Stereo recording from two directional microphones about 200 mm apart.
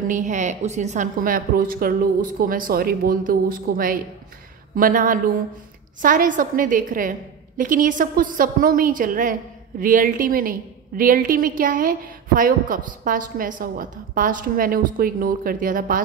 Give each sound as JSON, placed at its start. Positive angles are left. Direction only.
{"t": 0.1, "sound": "a woman's voice", "side_deg": -35}